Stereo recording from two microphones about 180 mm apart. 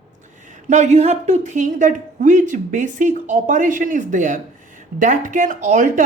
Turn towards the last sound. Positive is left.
turn(degrees=-45)  # may be behind; listen again after turning